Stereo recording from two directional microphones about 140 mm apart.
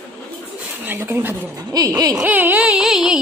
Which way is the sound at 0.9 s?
15° right (ahead or behind).